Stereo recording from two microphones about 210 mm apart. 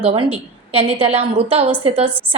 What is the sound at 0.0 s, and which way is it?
A woman's voice, 25° right (ahead or behind).